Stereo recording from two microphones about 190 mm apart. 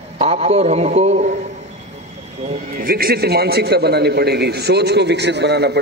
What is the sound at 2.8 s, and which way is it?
A man's voice, 50° right (ahead or behind).